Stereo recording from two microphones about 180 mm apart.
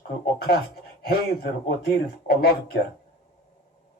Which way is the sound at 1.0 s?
60° left (ahead or behind).